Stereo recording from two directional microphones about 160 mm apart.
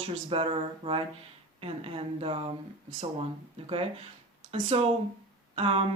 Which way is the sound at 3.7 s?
35° right (ahead or behind).